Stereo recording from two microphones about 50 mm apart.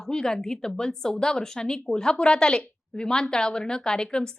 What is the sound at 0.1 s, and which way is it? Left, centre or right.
A woman's voice, centre.